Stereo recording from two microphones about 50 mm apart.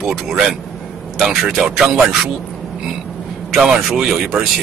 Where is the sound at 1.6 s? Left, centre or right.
Centre.